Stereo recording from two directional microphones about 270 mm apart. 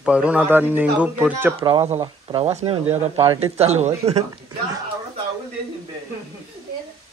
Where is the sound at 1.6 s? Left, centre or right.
Centre.